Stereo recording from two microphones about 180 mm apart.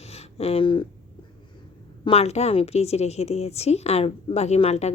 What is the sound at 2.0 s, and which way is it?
A woman's voice, 35° left (ahead or behind).